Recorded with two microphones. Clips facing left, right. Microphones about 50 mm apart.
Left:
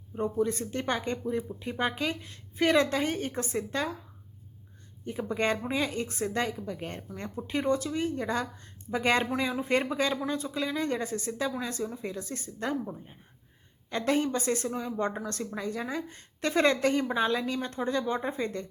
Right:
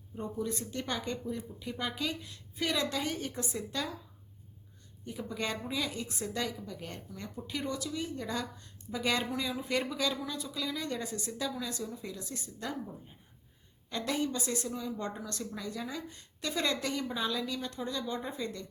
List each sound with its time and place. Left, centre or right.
0.1 s a woman's voice: left
5.0 s a woman's voice: left